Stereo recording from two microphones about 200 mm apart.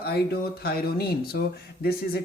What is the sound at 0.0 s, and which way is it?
Speech, 50° left (ahead or behind).